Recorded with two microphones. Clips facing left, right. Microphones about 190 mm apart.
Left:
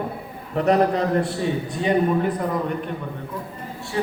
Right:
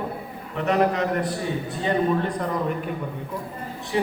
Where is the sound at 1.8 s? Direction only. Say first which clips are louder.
Left 2 dB; 15° left (ahead or behind).